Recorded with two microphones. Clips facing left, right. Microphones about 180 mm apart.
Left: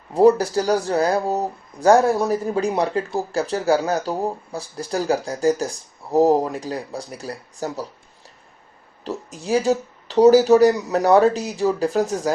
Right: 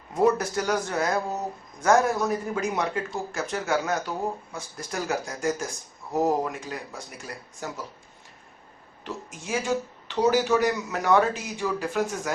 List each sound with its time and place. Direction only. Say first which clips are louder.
0.1 s speech: left 8 dB; 35° left (ahead or behind)
9.0 s speech: left 9 dB; 35° left (ahead or behind)